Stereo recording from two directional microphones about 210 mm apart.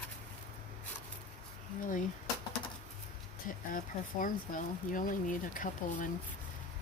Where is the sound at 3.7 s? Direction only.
40° left (ahead or behind).